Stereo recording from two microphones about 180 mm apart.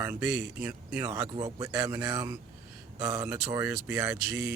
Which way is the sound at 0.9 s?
20° right (ahead or behind).